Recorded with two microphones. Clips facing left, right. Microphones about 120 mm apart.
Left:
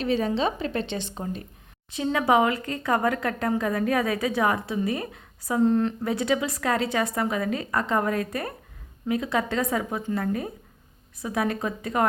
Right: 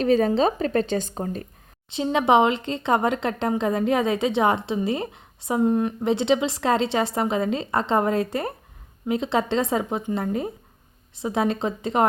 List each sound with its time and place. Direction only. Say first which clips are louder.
0.0 s a woman's voice: right 5 dB; 40° right (ahead or behind)
2.0 s a woman's voice: right 3 dB; 20° right (ahead or behind)
5.6 s a woman's voice: right 1 dB; 15° right (ahead or behind)